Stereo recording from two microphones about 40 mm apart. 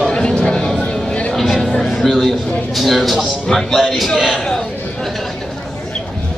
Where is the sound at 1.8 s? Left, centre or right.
Centre.